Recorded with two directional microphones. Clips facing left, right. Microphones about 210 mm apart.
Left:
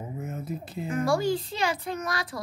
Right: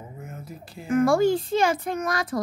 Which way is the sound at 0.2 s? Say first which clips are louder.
Left 7 dB; 20° left (ahead or behind).